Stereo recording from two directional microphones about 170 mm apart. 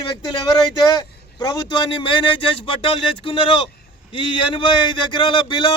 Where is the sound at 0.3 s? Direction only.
25° left (ahead or behind).